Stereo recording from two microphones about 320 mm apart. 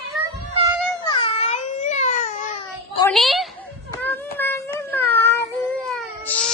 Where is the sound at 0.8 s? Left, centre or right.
Centre.